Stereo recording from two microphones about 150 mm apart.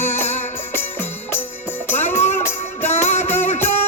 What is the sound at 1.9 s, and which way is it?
Music, 55° left (ahead or behind).